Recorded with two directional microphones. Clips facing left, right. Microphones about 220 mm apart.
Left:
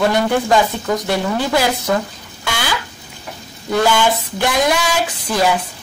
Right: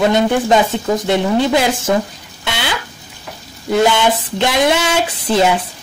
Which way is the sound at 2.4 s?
20° right (ahead or behind).